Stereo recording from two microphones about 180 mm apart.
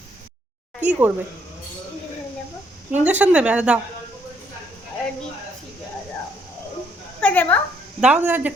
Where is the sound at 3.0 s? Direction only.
10° right (ahead or behind).